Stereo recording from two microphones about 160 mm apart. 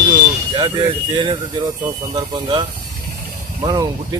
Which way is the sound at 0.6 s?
30° right (ahead or behind).